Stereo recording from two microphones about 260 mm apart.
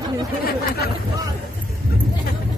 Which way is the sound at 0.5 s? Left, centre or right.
Left.